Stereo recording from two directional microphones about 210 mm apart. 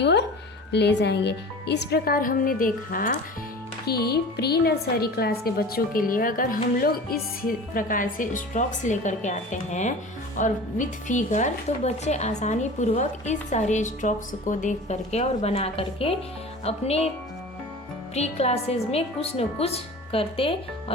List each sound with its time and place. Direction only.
0.0 s a sound: 55° left (ahead or behind)
0.7 s a woman's voice: 55° left (ahead or behind); by 17.1 s 30° left (ahead or behind)
18.1 s a woman's voice: 30° left (ahead or behind)